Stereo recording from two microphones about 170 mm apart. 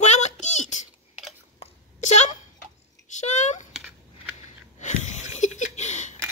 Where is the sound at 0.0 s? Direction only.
45° left (ahead or behind).